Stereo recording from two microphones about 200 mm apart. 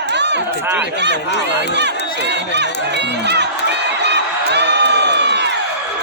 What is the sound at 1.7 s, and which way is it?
Run, 60° right (ahead or behind).